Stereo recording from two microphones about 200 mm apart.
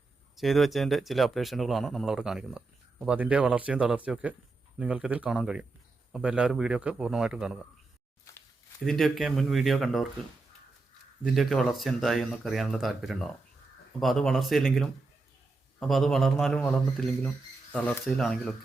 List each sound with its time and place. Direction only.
0.3 s speech: centre (ahead or behind)
8.3 s a sound: 15° left (ahead or behind)
8.8 s speech: centre (ahead or behind)
11.2 s speech: centre (ahead or behind)